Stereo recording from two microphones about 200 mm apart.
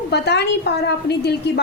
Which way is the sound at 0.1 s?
55° left (ahead or behind).